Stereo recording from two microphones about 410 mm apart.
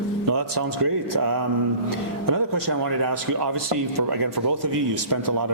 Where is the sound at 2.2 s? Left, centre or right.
Right.